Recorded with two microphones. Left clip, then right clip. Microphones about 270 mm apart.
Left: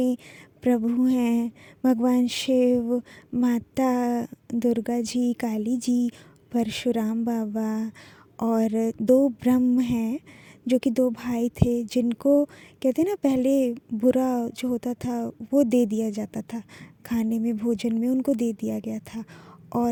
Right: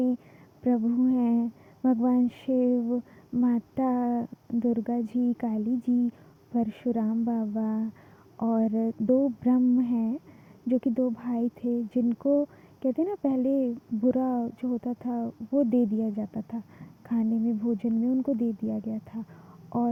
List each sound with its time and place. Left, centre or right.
0.6 s speech: left